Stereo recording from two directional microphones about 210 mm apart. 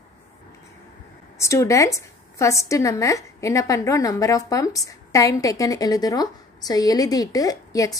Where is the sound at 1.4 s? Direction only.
15° left (ahead or behind).